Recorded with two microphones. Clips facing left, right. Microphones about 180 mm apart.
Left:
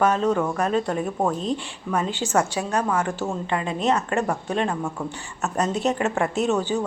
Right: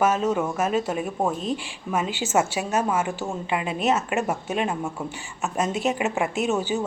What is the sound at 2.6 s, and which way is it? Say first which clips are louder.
Speech: even; 20° right (ahead or behind).